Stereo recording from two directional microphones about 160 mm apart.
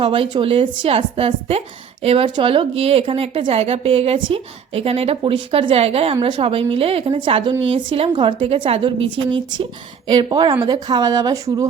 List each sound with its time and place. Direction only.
0.0 s speech: 35° right (ahead or behind)